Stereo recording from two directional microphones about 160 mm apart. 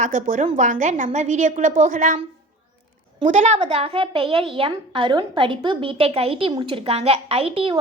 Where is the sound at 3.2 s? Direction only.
50° right (ahead or behind).